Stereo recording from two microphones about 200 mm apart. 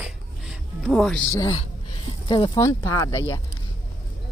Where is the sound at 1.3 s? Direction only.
20° left (ahead or behind).